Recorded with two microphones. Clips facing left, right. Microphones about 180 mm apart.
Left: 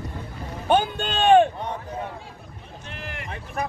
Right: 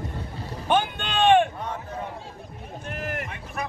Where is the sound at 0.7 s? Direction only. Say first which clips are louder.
Left 3 dB; 40° left (ahead or behind).